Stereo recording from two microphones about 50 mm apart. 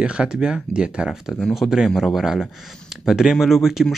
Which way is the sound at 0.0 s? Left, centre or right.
Centre.